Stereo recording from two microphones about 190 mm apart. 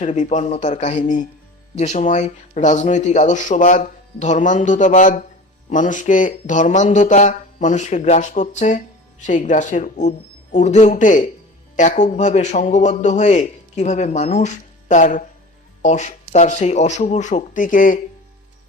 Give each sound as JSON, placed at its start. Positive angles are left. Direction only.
{"t": 0.0, "sound": "speech", "side_deg": 40}